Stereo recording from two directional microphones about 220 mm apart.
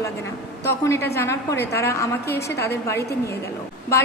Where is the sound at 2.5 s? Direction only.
50° left (ahead or behind).